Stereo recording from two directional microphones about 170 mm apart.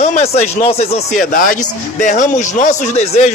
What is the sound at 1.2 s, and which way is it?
Speech, 55° left (ahead or behind).